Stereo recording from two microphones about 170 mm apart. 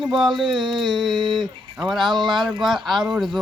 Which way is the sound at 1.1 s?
25° right (ahead or behind).